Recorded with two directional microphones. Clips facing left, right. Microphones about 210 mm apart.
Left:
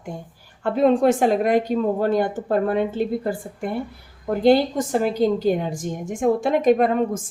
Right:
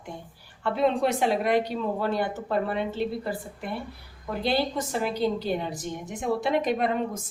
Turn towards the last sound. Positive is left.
turn(degrees=50)  # may be behind; listen again after turning